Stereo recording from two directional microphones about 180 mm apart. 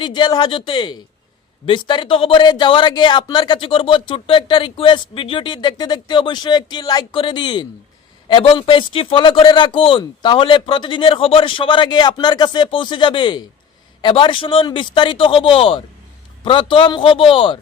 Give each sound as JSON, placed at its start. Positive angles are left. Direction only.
{"t": 0.0, "sound": "speech", "side_deg": 25}